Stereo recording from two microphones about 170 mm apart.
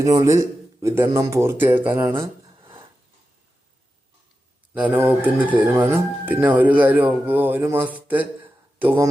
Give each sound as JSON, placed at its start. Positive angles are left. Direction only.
{"t": 0.0, "sound": "a man's voice", "side_deg": -20}
{"t": 4.7, "sound": "speech", "side_deg": -10}